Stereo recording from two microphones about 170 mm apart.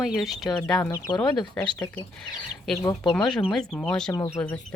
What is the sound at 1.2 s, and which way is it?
Speech, 25° left (ahead or behind).